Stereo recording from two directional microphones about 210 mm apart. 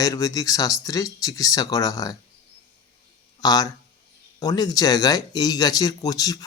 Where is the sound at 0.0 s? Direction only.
15° left (ahead or behind).